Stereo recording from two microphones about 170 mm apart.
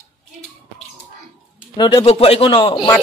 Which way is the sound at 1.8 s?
25° left (ahead or behind).